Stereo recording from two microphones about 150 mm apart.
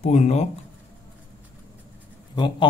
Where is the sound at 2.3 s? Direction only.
30° left (ahead or behind).